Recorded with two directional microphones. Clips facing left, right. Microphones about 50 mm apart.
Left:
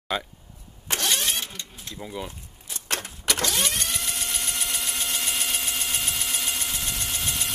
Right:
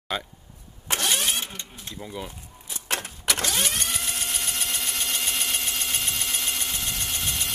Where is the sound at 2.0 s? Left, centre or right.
Centre.